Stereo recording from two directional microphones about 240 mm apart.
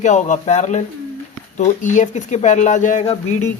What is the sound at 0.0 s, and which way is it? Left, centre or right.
Speech, left.